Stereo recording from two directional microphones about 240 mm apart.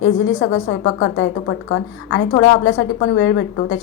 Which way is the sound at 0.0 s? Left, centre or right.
Left.